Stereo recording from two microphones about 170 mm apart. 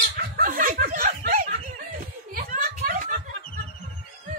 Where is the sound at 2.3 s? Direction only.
55° right (ahead or behind).